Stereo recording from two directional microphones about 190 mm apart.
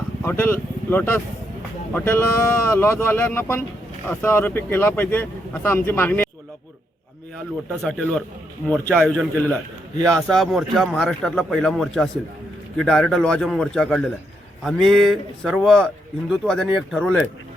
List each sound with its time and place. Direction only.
0.3 s speech: 10° left (ahead or behind)
7.3 s a man's voice: 5° left (ahead or behind)
10.0 s a man's voice: 15° right (ahead or behind)
10.2 s a man's voice: centre (ahead or behind)